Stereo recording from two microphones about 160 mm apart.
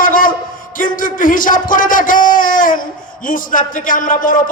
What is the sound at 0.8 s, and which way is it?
A man's voice, 60° left (ahead or behind).